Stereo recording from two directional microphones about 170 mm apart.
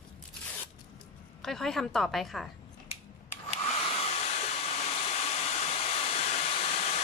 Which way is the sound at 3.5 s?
35° left (ahead or behind).